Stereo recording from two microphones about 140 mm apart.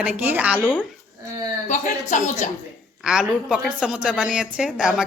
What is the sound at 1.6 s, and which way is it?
Speech, 65° left (ahead or behind).